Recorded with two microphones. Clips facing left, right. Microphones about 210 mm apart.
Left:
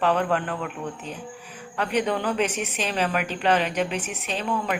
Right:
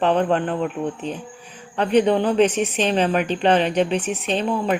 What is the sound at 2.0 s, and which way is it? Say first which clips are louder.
Speech: right 8 dB; 30° right (ahead or behind).